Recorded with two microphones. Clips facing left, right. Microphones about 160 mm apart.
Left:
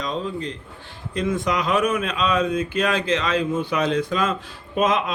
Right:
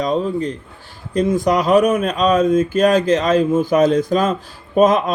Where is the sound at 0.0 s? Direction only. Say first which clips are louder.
Right 8 dB; 50° right (ahead or behind).